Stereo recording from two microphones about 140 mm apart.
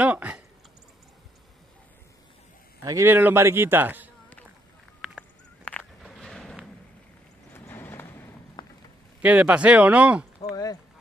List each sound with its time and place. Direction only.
0.0 s a sound: 10° right (ahead or behind)
2.8 s a man's voice: 20° right (ahead or behind)
5.7 s walk: 5° left (ahead or behind)
7.5 s vehicle: 15° left (ahead or behind)
9.2 s a man's voice: 10° right (ahead or behind)
10.5 s a sound: 25° left (ahead or behind)